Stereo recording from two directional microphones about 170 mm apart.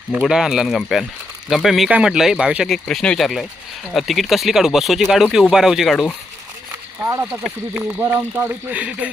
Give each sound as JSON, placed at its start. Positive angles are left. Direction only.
{"t": 0.2, "sound": "speech", "side_deg": -5}
{"t": 7.0, "sound": "speech", "side_deg": -15}